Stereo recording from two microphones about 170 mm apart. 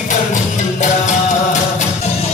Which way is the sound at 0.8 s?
45° left (ahead or behind).